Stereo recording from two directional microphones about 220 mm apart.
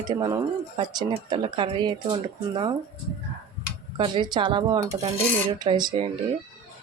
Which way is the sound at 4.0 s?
20° right (ahead or behind).